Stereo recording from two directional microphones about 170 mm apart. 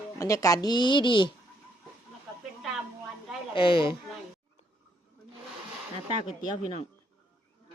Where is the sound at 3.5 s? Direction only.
30° left (ahead or behind).